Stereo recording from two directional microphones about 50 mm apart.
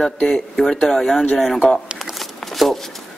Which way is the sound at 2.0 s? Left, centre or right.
Centre.